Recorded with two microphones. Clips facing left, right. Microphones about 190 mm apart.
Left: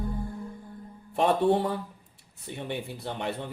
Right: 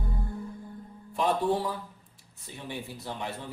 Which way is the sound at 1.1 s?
60° left (ahead or behind).